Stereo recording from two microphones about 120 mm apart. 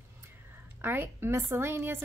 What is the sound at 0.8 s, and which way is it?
Speech, 20° right (ahead or behind).